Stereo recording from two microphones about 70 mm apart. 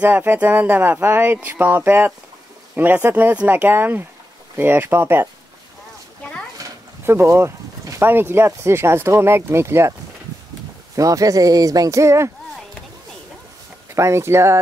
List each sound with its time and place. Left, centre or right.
0.0 s speech: right
7.1 s speech: right
11.0 s speech: right
13.9 s speech: right